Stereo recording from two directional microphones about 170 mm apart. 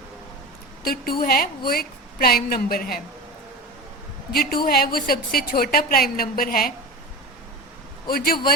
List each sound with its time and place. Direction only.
0.9 s a woman's voice: 60° left (ahead or behind)
4.3 s a woman's voice: 60° left (ahead or behind)
8.0 s a woman's voice: 60° left (ahead or behind)